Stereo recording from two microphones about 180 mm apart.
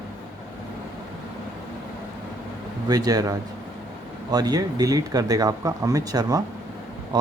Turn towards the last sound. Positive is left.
turn(degrees=-25)  # may be behind; listen again after turning